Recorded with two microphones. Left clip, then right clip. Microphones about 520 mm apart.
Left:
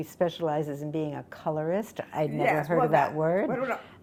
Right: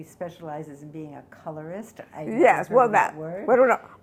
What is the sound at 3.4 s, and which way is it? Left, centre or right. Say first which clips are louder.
Speech: right 12 dB; right.